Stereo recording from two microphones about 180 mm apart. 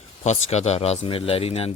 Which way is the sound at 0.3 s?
40° left (ahead or behind).